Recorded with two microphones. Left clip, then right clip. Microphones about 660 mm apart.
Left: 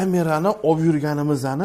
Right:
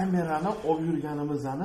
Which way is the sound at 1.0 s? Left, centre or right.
Left.